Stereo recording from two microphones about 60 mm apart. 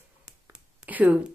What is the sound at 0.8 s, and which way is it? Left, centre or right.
Speech, right.